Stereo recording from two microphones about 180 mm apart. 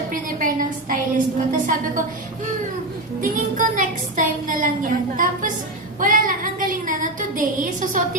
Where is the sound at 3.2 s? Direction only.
45° right (ahead or behind).